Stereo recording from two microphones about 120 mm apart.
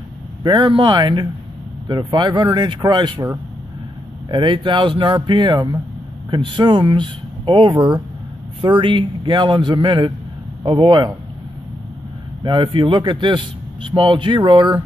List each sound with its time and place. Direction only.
0.4 s speech: 40° right (ahead or behind)
4.3 s a man's voice: 40° right (ahead or behind)
12.4 s a man's voice: 40° right (ahead or behind)